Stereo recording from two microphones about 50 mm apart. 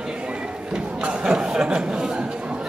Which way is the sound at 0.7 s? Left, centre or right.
Centre.